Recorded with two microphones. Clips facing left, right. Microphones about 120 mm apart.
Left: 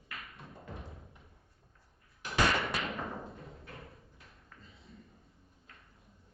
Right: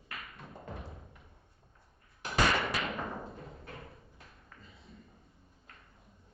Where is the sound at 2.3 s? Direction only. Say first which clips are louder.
Right 1 dB; centre (ahead or behind).